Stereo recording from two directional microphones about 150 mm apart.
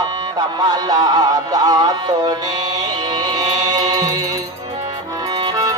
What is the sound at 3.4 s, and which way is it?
Music, 25° right (ahead or behind).